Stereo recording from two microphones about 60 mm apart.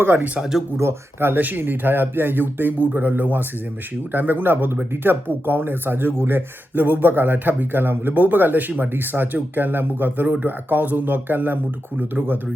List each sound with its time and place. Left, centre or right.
0.0 s speech: right
0.3 s speech: centre
0.8 s speech: right